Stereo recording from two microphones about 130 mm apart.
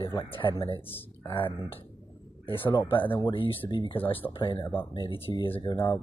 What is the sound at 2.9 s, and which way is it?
Speech, 40° left (ahead or behind).